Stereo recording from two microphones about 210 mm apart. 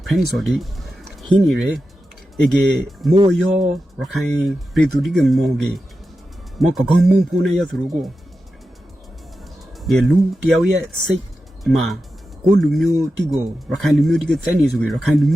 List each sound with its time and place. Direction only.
0.0 s speech: centre (ahead or behind)
9.8 s speech: centre (ahead or behind)